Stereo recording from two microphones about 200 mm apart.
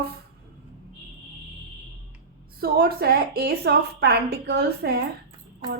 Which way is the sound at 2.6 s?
50° right (ahead or behind).